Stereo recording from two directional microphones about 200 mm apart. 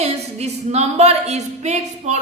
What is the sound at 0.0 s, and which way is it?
Speech, 35° right (ahead or behind).